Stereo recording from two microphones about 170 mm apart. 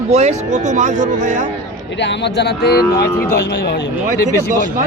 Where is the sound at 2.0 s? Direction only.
90° left; by 3.1 s 75° left (ahead or behind).